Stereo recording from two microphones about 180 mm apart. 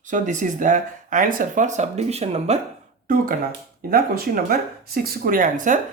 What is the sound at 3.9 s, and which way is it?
Speech, 55° right (ahead or behind).